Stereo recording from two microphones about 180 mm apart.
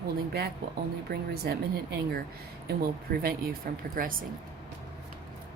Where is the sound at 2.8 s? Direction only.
55° right (ahead or behind).